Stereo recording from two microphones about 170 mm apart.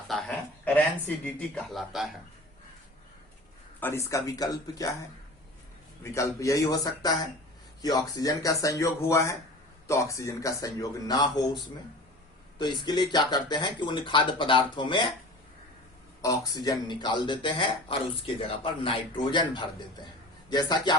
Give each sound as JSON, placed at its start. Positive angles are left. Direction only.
{"t": 0.1, "sound": "speech", "side_deg": 5}
{"t": 3.8, "sound": "speech", "side_deg": 15}
{"t": 6.0, "sound": "speech", "side_deg": 15}
{"t": 16.2, "sound": "speech", "side_deg": 25}